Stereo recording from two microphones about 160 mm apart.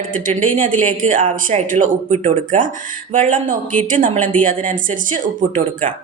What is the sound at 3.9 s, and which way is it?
Speech, 55° right (ahead or behind).